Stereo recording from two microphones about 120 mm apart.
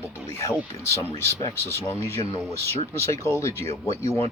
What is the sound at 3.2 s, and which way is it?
Speech, 25° left (ahead or behind).